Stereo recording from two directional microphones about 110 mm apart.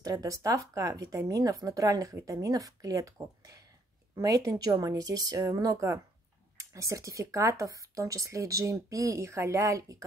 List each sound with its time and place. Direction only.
0.0 s speech: 30° right (ahead or behind)